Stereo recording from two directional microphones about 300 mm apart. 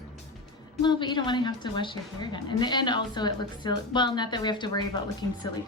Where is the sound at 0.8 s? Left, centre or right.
Centre.